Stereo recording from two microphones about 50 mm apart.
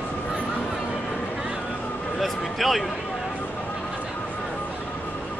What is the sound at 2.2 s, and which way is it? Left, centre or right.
Speech, centre.